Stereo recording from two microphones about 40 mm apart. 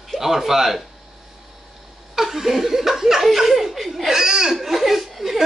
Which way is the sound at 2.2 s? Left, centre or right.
Centre.